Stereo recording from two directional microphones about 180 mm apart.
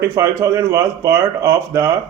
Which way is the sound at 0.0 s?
15° right (ahead or behind).